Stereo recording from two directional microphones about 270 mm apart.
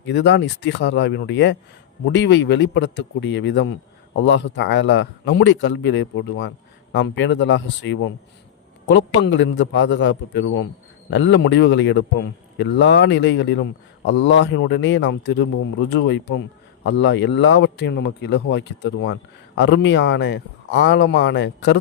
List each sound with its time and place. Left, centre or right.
0.0 s speech: left